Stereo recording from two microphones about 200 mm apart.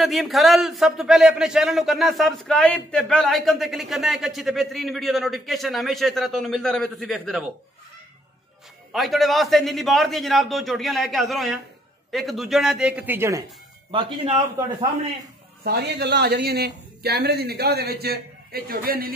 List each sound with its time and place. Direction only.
0.0 s a man's voice: centre (ahead or behind)
8.9 s a man's voice: centre (ahead or behind)
13.9 s a man's voice: 25° right (ahead or behind)
15.6 s a man's voice: 55° right (ahead or behind)